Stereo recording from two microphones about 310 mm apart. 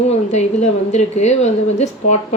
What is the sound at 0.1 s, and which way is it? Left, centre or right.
A woman's voice, left.